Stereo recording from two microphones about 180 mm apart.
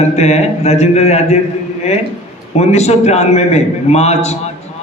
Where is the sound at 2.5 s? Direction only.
35° left (ahead or behind).